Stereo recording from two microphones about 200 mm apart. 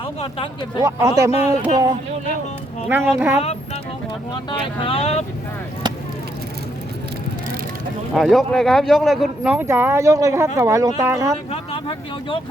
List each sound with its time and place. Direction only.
0.0 s speech: 25° left (ahead or behind)
0.8 s speech: 15° right (ahead or behind)
2.9 s speech: 10° right (ahead or behind)
4.8 s speech: 30° left (ahead or behind)
8.1 s speech: centre (ahead or behind); by 11.3 s 15° right (ahead or behind)
11.5 s speech: 25° left (ahead or behind)